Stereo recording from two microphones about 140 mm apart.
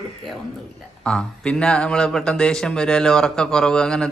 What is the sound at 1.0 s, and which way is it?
Speech, 5° left (ahead or behind).